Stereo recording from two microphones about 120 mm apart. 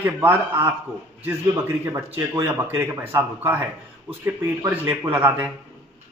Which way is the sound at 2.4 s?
20° right (ahead or behind).